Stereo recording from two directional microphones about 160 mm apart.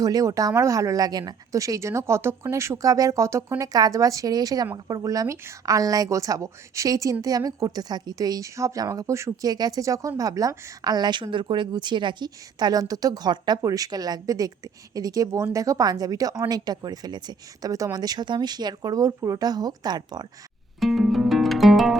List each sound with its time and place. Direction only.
0.0 s speech: 25° right (ahead or behind)
20.7 s music: centre (ahead or behind)